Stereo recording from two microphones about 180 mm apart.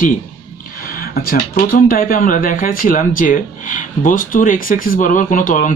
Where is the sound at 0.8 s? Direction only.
55° left (ahead or behind).